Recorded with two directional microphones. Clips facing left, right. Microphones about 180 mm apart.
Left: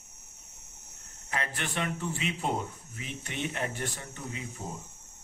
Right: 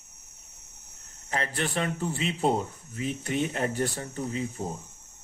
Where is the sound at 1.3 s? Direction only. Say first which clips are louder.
Right 4 dB; 35° right (ahead or behind).